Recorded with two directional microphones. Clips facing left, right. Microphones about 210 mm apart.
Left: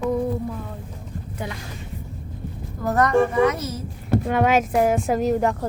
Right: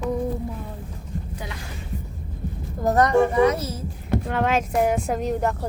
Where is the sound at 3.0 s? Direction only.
20° right (ahead or behind).